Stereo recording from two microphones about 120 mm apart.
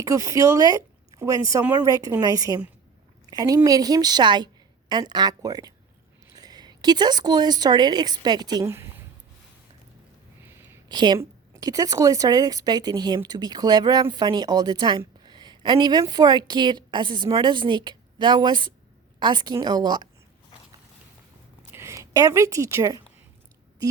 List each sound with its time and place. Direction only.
0.0 s a woman's voice: 25° right (ahead or behind)
8.7 s a sound: 20° right (ahead or behind)
10.8 s a woman's voice: 35° right (ahead or behind)
21.7 s a woman's voice: 20° right (ahead or behind)